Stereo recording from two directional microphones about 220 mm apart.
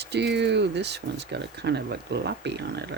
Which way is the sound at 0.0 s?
50° right (ahead or behind).